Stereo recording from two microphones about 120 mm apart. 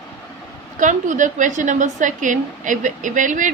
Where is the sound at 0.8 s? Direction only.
90° right.